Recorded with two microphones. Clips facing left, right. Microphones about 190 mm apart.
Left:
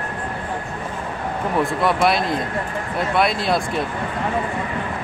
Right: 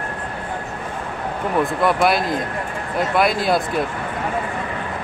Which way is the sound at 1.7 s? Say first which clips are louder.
Right 1 dB; centre (ahead or behind).